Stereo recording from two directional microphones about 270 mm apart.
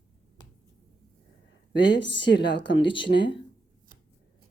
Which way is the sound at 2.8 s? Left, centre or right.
Centre.